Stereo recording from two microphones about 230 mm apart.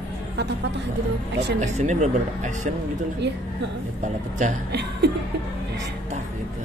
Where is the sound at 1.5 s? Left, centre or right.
Right.